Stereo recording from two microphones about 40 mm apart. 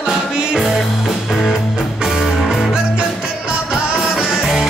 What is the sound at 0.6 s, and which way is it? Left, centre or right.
Music, centre.